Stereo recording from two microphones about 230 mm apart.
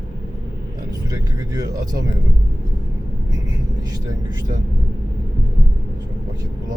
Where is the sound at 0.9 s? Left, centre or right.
Centre.